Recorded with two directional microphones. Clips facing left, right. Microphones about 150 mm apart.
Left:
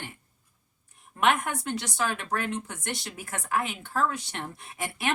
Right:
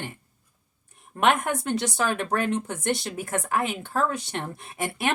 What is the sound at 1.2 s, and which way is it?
A woman's voice, 45° right (ahead or behind).